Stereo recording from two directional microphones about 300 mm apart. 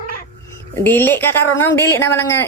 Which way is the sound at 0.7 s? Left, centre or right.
Centre.